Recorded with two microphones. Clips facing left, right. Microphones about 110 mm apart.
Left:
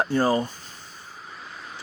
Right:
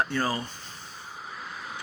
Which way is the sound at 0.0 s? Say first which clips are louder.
Left 5 dB; 25° left (ahead or behind).